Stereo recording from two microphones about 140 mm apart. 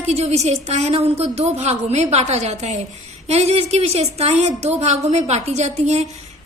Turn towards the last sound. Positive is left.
turn(degrees=-55)  # may be behind; listen again after turning